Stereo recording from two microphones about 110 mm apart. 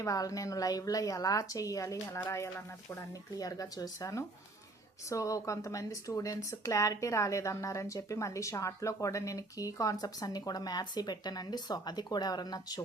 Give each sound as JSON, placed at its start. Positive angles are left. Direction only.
{"t": 0.0, "sound": "speech", "side_deg": 30}